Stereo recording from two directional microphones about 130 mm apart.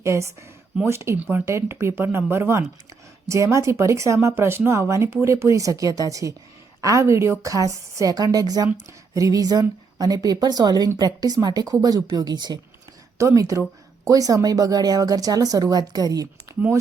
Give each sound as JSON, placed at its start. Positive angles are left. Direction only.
{"t": 0.0, "sound": "a woman's voice", "side_deg": -20}